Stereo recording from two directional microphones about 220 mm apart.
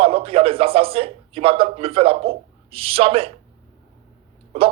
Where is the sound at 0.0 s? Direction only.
25° right (ahead or behind).